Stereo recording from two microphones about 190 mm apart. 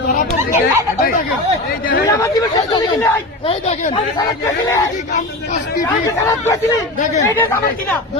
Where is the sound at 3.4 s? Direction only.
35° left (ahead or behind).